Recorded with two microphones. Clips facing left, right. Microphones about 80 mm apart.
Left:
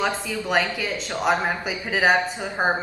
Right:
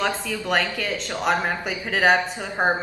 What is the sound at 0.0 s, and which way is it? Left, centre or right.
A woman's voice, centre.